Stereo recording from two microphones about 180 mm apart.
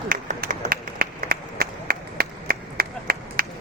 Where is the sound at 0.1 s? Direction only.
50° right (ahead or behind).